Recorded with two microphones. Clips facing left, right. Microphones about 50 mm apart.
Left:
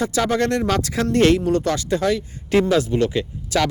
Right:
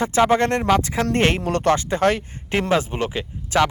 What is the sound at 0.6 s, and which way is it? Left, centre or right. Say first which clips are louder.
Speech: right 2 dB; centre.